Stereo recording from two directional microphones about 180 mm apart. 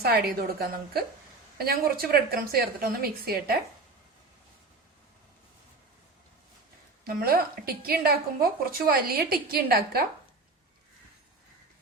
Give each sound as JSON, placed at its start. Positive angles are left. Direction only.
{"t": 0.0, "sound": "a woman's voice", "side_deg": -60}
{"t": 7.0, "sound": "a woman's voice", "side_deg": -55}